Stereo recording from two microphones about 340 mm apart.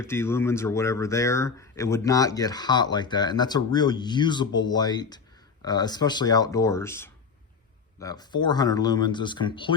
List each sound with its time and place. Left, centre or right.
0.0 s speech: centre